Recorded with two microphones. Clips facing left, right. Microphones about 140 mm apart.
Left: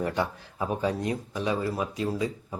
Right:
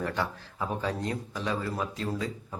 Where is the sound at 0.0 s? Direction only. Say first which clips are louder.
Left 3 dB; 15° left (ahead or behind).